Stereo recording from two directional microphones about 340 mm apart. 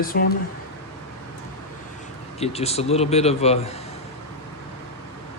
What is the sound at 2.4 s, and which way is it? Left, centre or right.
Speech, centre.